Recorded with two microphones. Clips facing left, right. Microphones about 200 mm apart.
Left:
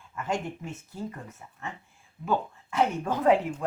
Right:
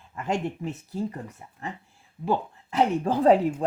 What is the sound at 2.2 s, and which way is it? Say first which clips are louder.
Speech: right 2 dB; 30° right (ahead or behind).